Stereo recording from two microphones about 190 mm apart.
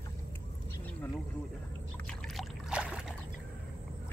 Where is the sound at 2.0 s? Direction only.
Centre (ahead or behind).